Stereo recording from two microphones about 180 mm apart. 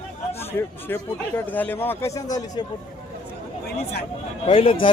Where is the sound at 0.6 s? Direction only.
10° left (ahead or behind).